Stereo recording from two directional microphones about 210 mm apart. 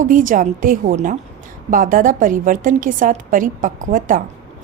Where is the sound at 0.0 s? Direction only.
40° right (ahead or behind).